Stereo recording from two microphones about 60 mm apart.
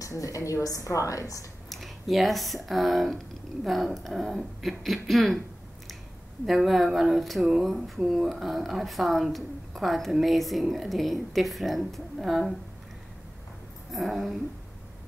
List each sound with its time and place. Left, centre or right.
0.0 s a woman's voice: left
1.7 s speech: centre
6.4 s speech: centre
13.9 s speech: centre